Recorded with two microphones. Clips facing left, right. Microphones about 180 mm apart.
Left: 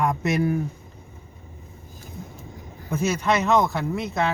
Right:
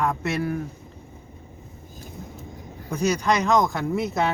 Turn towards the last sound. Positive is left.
turn(degrees=0)  # may be behind; listen again after turning